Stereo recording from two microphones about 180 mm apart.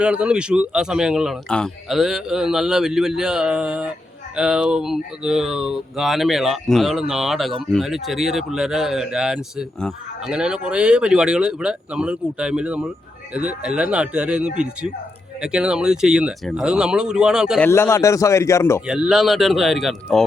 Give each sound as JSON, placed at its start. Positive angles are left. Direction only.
{"t": 0.0, "sound": "speech", "side_deg": -5}
{"t": 17.6, "sound": "a man's voice", "side_deg": 15}
{"t": 18.9, "sound": "speech", "side_deg": -5}